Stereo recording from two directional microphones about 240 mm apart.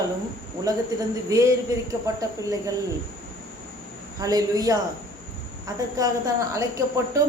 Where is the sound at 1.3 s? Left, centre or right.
Centre.